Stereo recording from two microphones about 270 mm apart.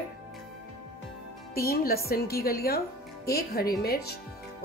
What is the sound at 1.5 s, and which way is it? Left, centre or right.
Speech, left.